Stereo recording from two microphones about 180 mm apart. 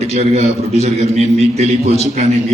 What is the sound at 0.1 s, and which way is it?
A man's voice, 35° right (ahead or behind).